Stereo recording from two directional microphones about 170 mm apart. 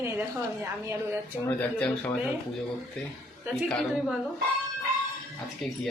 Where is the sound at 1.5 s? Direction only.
10° left (ahead or behind).